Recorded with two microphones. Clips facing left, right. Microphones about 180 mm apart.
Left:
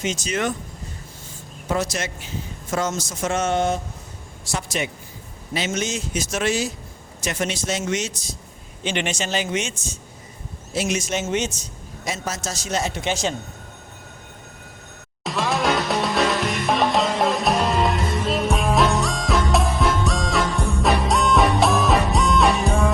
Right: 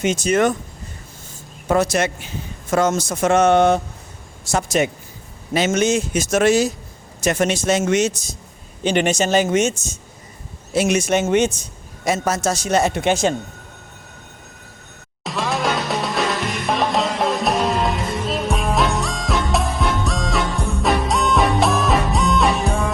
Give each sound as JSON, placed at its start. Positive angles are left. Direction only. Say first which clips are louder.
{"t": 0.0, "sound": "a man's voice", "louder": "right 7 dB", "side_deg": -55}
{"t": 1.6, "sound": "a man's voice", "louder": "right 7 dB", "side_deg": -60}
{"t": 4.5, "sound": "a man's voice", "louder": "right 8 dB", "side_deg": -45}
{"t": 10.8, "sound": "a man's voice", "louder": "right 7 dB", "side_deg": -60}
{"t": 15.2, "sound": "music", "louder": "even", "side_deg": 0}